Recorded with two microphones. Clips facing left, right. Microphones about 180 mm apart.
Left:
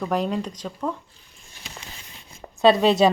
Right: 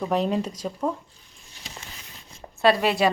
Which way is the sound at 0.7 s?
25° right (ahead or behind).